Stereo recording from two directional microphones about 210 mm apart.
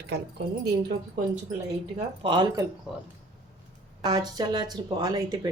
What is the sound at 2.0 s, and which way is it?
Speech, 20° right (ahead or behind).